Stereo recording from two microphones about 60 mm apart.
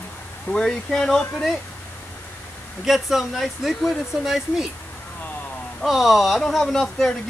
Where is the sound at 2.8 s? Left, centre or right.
Centre.